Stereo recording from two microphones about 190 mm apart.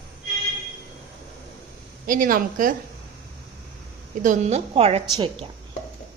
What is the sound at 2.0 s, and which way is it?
Speech, 45° right (ahead or behind).